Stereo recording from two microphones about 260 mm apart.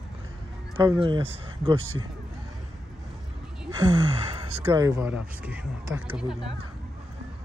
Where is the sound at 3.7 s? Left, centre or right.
Centre.